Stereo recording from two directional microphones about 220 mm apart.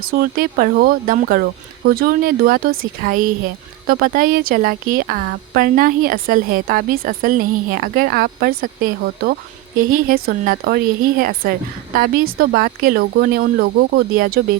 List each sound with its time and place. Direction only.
0.0 s a woman's voice: 40° right (ahead or behind)